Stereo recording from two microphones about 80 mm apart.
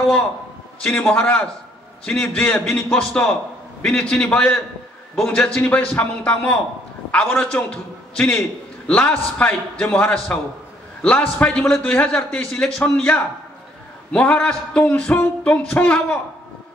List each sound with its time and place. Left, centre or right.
0.8 s a man's voice: centre
2.6 s a man's voice: centre